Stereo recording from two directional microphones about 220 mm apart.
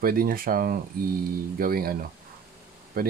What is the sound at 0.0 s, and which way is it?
Speech, 40° right (ahead or behind).